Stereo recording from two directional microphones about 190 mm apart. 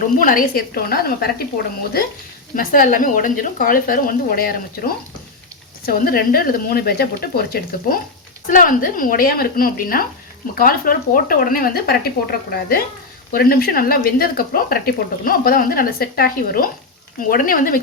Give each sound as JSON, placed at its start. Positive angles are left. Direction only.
{"t": 0.2, "sound": "speech", "side_deg": 45}